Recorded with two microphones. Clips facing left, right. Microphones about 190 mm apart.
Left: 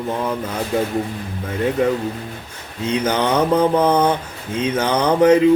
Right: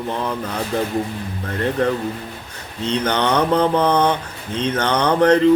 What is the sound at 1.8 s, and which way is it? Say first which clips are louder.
Mantra: left 1 dB; 5° left (ahead or behind).